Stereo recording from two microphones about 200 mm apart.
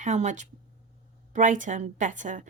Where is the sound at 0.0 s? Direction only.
35° right (ahead or behind).